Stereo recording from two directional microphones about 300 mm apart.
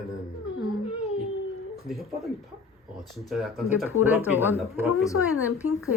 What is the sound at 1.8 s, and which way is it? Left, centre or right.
Speech, centre.